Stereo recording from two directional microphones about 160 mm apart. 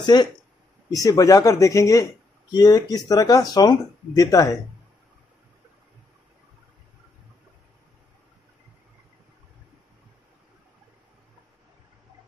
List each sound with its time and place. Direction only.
0.0 s speech: 25° left (ahead or behind)